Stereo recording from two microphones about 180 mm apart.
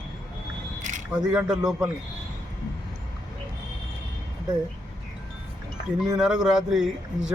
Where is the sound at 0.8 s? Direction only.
45° right (ahead or behind).